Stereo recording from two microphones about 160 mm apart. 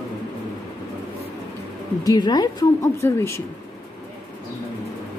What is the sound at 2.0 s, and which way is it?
A woman's voice, 25° left (ahead or behind).